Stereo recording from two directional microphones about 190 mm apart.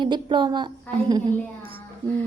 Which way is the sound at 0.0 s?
25° right (ahead or behind).